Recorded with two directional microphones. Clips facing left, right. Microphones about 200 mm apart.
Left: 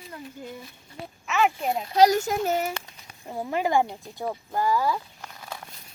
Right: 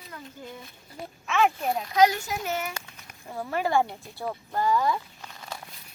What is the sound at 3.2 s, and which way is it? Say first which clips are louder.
Speech: left 2 dB; 15° left (ahead or behind).